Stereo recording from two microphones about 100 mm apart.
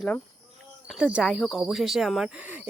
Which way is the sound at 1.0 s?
10° right (ahead or behind).